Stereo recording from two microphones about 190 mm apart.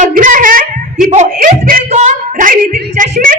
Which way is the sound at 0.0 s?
45° right (ahead or behind).